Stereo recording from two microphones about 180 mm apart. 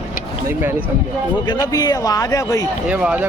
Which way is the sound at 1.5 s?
20° left (ahead or behind).